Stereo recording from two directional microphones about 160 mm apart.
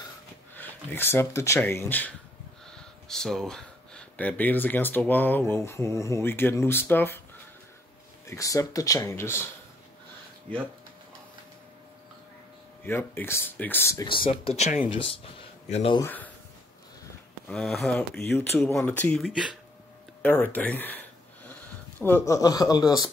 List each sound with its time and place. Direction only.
0.6 s speech: 15° left (ahead or behind)
8.3 s speech: 20° left (ahead or behind)
12.8 s speech: 15° left (ahead or behind)
14.0 s speech: 30° left (ahead or behind)
16.0 s speech: 10° left (ahead or behind)
17.5 s speech: centre (ahead or behind)
19.2 s speech: 5° right (ahead or behind)
20.2 s a sound: 10° left (ahead or behind)
22.0 s speech: 15° left (ahead or behind)